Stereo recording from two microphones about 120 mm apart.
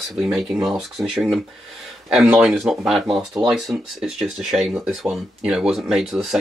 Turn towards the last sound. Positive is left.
turn(degrees=0)  # may be behind; listen again after turning